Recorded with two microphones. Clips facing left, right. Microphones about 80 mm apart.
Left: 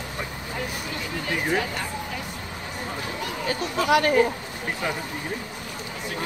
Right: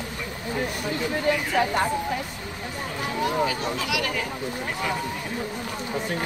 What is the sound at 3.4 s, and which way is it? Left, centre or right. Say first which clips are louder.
Speech: left 3 dB; left.